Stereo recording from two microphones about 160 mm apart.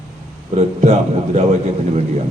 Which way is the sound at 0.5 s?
40° right (ahead or behind).